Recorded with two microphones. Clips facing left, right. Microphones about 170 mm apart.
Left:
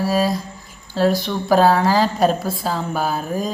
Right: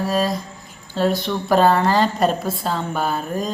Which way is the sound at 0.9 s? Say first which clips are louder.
Left 2 dB; centre (ahead or behind).